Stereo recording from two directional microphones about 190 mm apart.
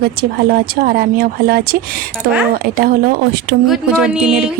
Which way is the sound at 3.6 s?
5° right (ahead or behind).